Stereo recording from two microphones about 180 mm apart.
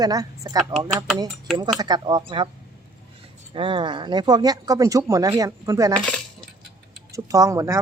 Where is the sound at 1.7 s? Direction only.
25° right (ahead or behind).